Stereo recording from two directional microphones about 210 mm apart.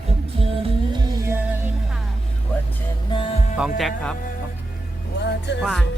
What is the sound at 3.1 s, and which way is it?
Speech, 25° left (ahead or behind).